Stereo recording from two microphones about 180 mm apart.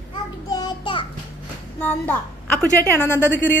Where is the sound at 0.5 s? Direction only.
25° left (ahead or behind).